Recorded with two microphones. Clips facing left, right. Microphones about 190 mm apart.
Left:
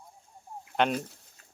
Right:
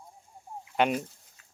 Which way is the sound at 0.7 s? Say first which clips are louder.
Right 1 dB; 10° right (ahead or behind).